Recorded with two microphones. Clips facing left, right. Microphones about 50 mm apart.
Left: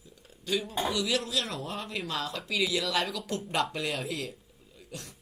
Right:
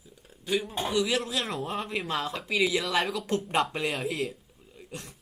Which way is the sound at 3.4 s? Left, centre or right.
Right.